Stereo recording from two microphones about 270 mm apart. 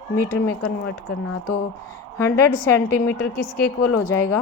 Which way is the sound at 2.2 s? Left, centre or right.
Centre.